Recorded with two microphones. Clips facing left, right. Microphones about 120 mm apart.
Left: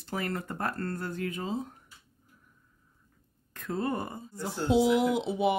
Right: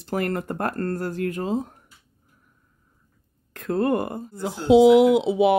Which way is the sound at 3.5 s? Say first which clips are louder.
Right 9 dB; 65° right (ahead or behind).